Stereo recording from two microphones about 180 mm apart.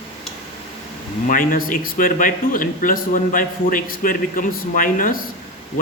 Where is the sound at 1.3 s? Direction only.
50° left (ahead or behind).